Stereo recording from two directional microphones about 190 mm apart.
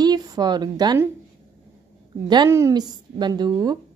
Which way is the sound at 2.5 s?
15° right (ahead or behind).